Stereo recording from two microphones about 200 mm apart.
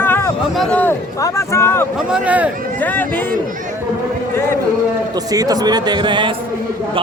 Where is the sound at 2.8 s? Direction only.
10° left (ahead or behind).